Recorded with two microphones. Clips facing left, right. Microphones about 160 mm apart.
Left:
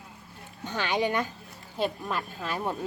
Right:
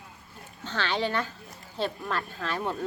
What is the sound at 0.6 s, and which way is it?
Crowing, 15° left (ahead or behind).